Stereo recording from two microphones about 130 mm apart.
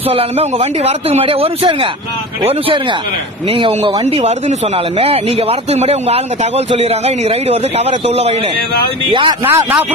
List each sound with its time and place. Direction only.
0.1 s speech: 50° right (ahead or behind)
4.0 s speech: 55° right (ahead or behind)
9.0 s speech: 40° right (ahead or behind)
9.4 s a man's voice: 20° right (ahead or behind)